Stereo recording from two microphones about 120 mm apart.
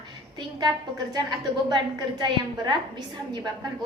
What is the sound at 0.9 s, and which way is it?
A woman's voice, 35° right (ahead or behind).